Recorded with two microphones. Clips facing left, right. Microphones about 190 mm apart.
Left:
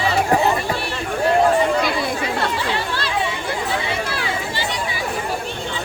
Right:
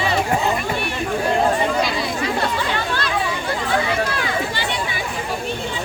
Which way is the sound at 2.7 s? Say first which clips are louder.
Right 1 dB; 30° left (ahead or behind).